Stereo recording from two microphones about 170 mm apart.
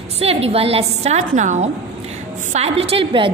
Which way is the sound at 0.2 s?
35° right (ahead or behind).